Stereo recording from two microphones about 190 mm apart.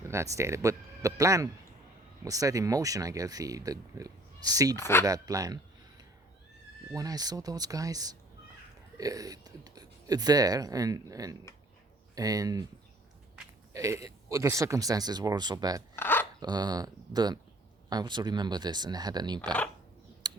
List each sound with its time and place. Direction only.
0.0 s speech: 15° right (ahead or behind)
4.8 s speech: 10° left (ahead or behind)
5.0 s speech: 20° right (ahead or behind)
6.9 s speech: 20° right (ahead or behind)
13.7 s speech: 15° right (ahead or behind)
16.0 s dog: 10° left (ahead or behind)
16.4 s speech: 20° right (ahead or behind)
20.2 s a sound: 20° right (ahead or behind)